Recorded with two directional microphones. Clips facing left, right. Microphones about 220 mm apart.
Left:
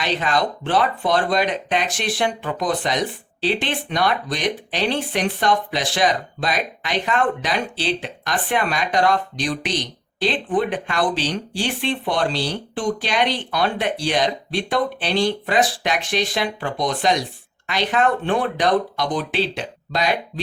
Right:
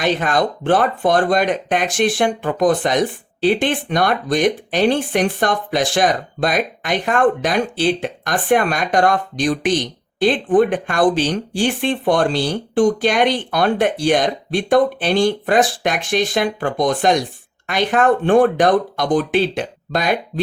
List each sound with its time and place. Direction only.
0.0 s speech: 50° right (ahead or behind)